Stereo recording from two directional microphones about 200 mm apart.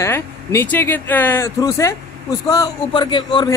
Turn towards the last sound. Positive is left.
turn(degrees=25)  # may be behind; listen again after turning